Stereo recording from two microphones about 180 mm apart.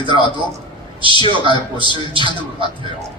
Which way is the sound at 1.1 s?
25° left (ahead or behind).